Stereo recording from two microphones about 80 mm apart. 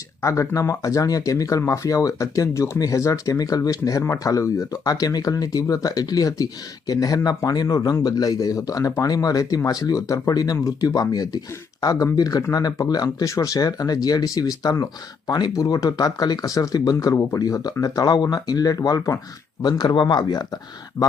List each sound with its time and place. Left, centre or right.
0.2 s speech: left
19.6 s speech: left
21.0 s speech: left